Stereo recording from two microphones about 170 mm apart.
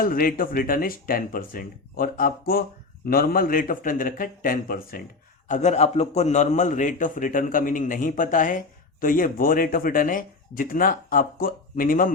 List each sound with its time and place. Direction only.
0.0 s speech: 55° left (ahead or behind)
5.5 s a man's voice: 45° left (ahead or behind)